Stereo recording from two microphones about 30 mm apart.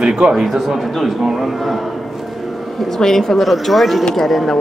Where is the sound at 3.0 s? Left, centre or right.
Centre.